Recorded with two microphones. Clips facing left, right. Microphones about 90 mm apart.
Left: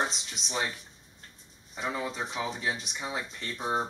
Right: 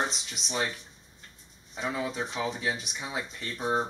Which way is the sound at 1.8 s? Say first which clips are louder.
Right 1 dB; centre (ahead or behind).